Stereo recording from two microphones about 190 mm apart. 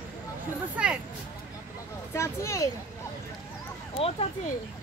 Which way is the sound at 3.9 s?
30° left (ahead or behind).